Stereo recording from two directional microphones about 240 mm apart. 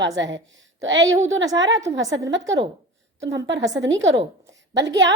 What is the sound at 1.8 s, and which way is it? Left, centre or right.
Speech, centre.